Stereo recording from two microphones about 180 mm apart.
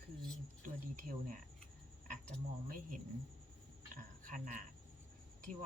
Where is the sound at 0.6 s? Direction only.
50° right (ahead or behind).